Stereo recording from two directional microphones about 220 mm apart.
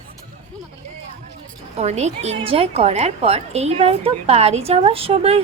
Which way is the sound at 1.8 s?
30° right (ahead or behind).